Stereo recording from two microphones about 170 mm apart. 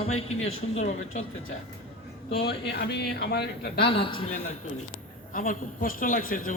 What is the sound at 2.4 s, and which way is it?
Speech, 75° left (ahead or behind).